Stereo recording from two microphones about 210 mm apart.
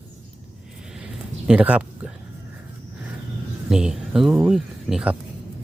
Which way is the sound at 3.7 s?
5° right (ahead or behind).